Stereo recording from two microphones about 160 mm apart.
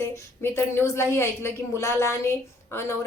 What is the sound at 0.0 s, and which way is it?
A woman's voice, 15° left (ahead or behind).